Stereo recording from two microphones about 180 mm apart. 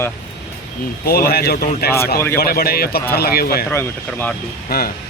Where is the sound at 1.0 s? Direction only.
55° left (ahead or behind).